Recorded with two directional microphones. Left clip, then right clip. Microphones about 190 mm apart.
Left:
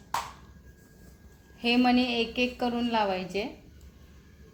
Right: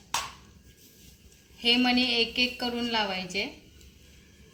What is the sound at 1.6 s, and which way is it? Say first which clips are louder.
A woman's voice: right 1 dB; 35° left (ahead or behind).